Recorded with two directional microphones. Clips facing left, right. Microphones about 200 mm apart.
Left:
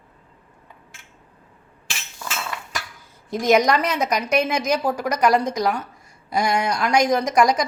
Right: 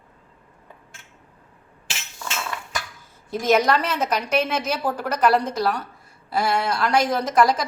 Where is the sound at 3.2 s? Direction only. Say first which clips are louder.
Left 2 dB; 15° left (ahead or behind).